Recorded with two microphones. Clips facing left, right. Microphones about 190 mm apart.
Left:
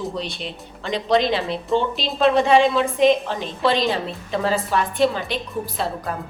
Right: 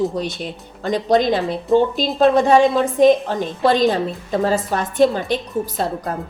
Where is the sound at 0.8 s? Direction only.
45° right (ahead or behind).